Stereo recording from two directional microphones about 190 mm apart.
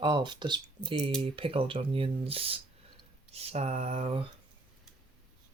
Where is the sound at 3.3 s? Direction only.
30° right (ahead or behind).